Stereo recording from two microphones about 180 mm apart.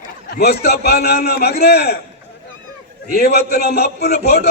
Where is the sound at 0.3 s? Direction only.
65° left (ahead or behind).